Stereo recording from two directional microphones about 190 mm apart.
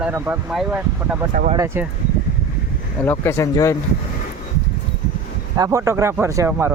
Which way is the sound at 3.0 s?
15° left (ahead or behind).